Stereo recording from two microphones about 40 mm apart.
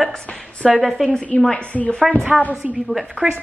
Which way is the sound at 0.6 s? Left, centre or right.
Centre.